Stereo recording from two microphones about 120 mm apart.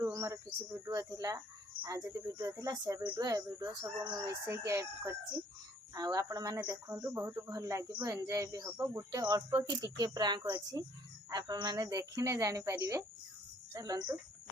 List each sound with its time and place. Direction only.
0.0 s bird: 25° right (ahead or behind)
0.9 s speech: 30° right (ahead or behind)
4.3 s speech: 25° right (ahead or behind)